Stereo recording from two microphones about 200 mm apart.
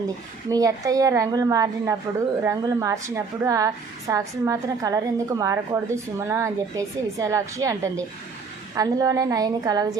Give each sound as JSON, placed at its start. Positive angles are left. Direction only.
{"t": 0.5, "sound": "a woman's voice", "side_deg": -15}